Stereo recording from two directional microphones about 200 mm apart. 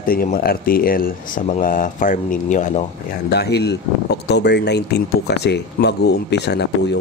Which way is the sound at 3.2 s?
55° left (ahead or behind).